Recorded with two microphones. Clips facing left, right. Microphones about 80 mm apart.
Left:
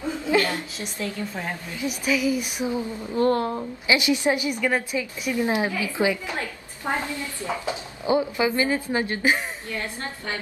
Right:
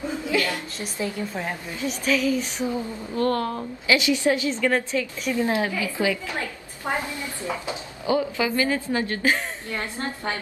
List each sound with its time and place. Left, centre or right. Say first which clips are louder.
0.3 s a sound: left 3 dB; left
1.9 s a woman's voice: right 1 dB; centre
7.0 s a woman's voice: left 1 dB; right
8.1 s a woman's voice: left 1 dB; left
9.7 s a woman's voice: right 2 dB; right